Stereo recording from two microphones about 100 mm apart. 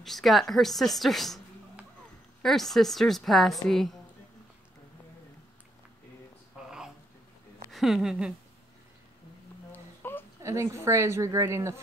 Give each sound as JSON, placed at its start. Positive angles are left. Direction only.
{"t": 0.0, "sound": "a woman's voice", "side_deg": 0}
{"t": 2.4, "sound": "a woman's voice", "side_deg": 5}
{"t": 7.7, "sound": "speech", "side_deg": -5}
{"t": 9.7, "sound": "a sound", "side_deg": 20}
{"t": 10.4, "sound": "a woman's voice", "side_deg": -30}